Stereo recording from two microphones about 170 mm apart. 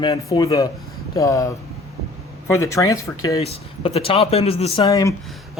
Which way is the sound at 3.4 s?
35° left (ahead or behind).